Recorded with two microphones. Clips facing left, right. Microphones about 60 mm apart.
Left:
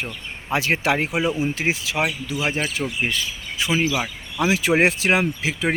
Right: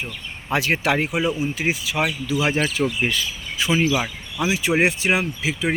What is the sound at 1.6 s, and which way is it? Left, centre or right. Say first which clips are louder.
Speech: right 2 dB; centre.